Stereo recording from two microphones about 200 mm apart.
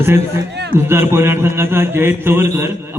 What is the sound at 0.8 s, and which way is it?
A man's voice, 10° right (ahead or behind).